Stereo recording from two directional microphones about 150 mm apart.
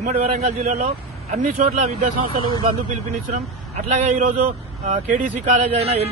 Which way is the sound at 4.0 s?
55° right (ahead or behind).